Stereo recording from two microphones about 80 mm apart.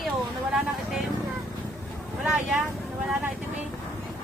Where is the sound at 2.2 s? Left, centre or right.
Centre.